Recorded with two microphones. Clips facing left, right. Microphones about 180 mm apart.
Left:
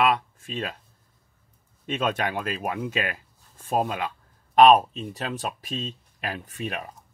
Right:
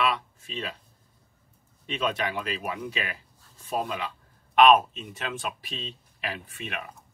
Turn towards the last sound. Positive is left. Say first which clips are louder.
# left 5 dB
turn(degrees=40)  # may be behind; listen again after turning